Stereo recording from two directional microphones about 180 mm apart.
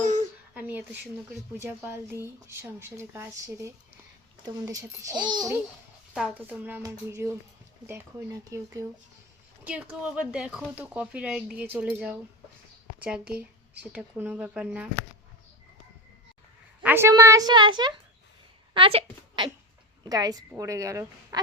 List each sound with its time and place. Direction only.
0.0 s a sound: 40° right (ahead or behind)
0.5 s a sound: 10° right (ahead or behind)
1.5 s a child's voice: 15° right (ahead or behind)
6.1 s speech: 5° right (ahead or behind)
8.4 s a child's voice: 20° right (ahead or behind)
9.6 s speech: 5° right (ahead or behind)
16.8 s a child's voice: 15° right (ahead or behind); by 19.0 s 30° right (ahead or behind)
20.1 s a child's voice: 20° right (ahead or behind)